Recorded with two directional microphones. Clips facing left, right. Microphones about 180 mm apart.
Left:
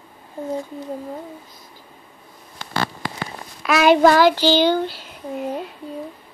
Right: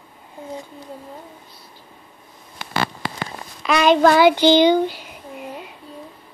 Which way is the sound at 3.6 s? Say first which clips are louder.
Left 1 dB; 5° left (ahead or behind).